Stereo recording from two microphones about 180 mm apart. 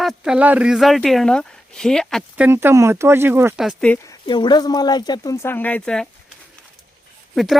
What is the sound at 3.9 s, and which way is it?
Speech, 20° left (ahead or behind).